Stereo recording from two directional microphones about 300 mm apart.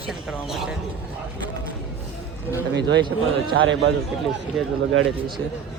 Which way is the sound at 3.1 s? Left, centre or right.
Right.